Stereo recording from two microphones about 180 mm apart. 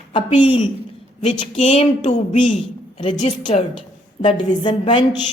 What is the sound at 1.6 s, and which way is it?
Speech, 40° left (ahead or behind).